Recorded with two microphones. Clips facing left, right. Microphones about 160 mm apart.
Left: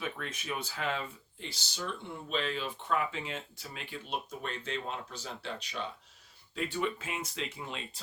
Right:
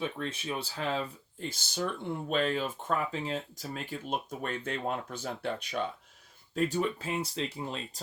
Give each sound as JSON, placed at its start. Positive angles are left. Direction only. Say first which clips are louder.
{"t": 0.0, "sound": "speech", "louder": "right 4 dB", "side_deg": -30}
{"t": 6.8, "sound": "speech", "louder": "right 2 dB", "side_deg": -35}